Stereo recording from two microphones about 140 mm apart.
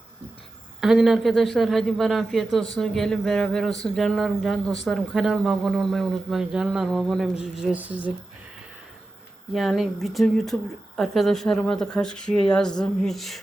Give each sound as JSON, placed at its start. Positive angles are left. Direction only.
{"t": 0.8, "sound": "speech", "side_deg": -5}
{"t": 9.5, "sound": "speech", "side_deg": 0}